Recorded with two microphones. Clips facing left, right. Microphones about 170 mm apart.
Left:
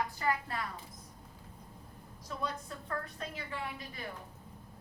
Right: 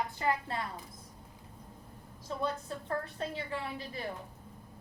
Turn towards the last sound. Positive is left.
turn(degrees=-30)  # may be behind; listen again after turning